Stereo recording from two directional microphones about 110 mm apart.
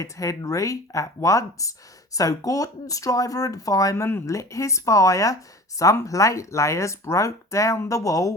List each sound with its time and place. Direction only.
0.0 s speech: 30° left (ahead or behind)